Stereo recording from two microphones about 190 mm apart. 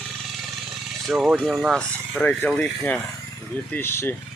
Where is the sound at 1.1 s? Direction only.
Centre (ahead or behind).